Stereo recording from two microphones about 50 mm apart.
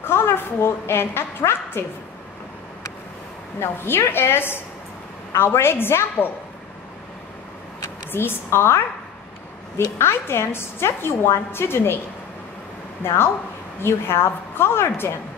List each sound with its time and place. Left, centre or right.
0.0 s a woman's voice: left
3.5 s a woman's voice: left
8.1 s a woman's voice: left
9.9 s a woman's voice: left
13.0 s a woman's voice: left